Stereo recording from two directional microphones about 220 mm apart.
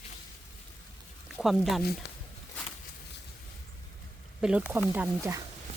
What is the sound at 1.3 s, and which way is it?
Speech, centre (ahead or behind).